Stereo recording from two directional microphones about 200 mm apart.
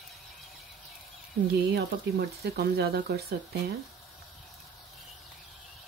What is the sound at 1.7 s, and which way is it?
Speech, 50° right (ahead or behind).